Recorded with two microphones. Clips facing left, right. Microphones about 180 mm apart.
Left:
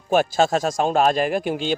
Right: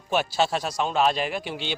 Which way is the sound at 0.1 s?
45° left (ahead or behind).